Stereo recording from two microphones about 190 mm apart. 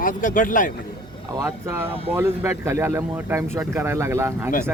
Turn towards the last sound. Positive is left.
turn(degrees=-15)  # may be behind; listen again after turning